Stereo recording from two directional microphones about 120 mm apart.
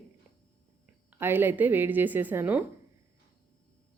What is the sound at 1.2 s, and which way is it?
Speech, 20° right (ahead or behind).